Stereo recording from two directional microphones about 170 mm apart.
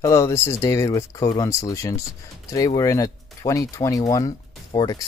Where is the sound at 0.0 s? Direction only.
20° left (ahead or behind).